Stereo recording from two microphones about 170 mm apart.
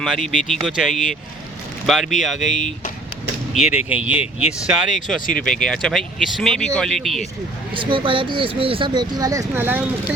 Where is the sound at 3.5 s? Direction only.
5° right (ahead or behind).